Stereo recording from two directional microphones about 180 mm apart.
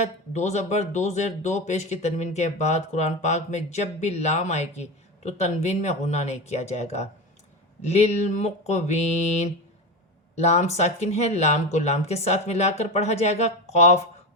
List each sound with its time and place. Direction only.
0.0 s speech: 40° left (ahead or behind)